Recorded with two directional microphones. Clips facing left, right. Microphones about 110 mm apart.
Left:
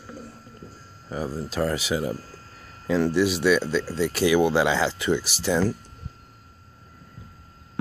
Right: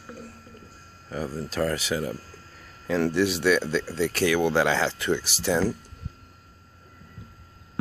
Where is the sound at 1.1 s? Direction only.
15° left (ahead or behind).